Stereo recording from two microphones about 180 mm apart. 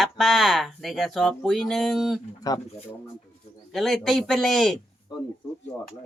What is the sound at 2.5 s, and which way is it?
Speech, 20° left (ahead or behind).